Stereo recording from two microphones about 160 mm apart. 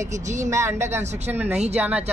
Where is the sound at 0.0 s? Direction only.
50° right (ahead or behind).